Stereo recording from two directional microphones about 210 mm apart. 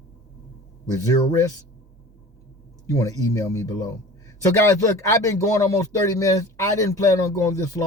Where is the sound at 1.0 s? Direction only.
15° left (ahead or behind).